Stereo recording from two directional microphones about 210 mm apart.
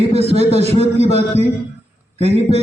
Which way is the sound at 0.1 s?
30° right (ahead or behind).